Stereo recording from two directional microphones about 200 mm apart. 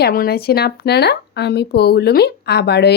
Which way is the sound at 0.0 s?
50° left (ahead or behind).